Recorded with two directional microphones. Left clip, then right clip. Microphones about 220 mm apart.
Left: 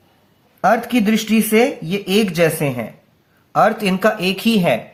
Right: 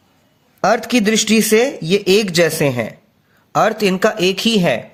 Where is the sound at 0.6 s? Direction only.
40° right (ahead or behind).